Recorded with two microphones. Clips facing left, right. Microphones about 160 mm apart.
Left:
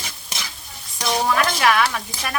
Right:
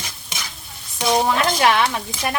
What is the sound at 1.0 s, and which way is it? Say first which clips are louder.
Stir: right 2 dB; 25° right (ahead or behind).